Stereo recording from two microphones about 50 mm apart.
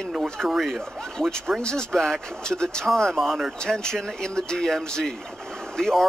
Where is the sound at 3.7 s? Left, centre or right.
Centre.